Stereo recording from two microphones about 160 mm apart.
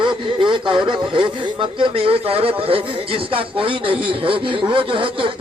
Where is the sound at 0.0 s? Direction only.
30° right (ahead or behind).